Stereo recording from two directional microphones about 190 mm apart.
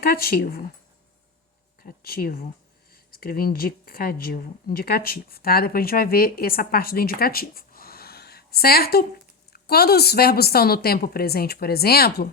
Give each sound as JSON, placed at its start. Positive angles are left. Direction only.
{"t": 0.0, "sound": "speech", "side_deg": 50}
{"t": 1.8, "sound": "a woman's voice", "side_deg": 50}